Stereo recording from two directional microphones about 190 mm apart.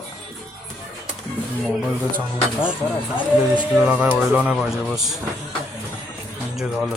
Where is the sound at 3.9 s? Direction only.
5° right (ahead or behind).